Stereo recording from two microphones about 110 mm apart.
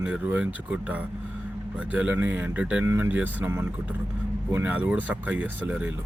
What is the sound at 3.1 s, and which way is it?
Speech, 15° right (ahead or behind).